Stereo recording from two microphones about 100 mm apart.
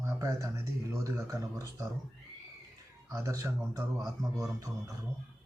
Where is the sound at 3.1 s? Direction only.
35° right (ahead or behind).